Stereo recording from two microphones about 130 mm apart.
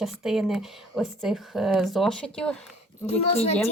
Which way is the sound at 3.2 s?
55° left (ahead or behind).